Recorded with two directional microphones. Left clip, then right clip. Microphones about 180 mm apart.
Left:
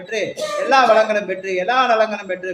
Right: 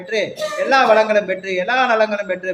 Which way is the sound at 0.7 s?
20° right (ahead or behind).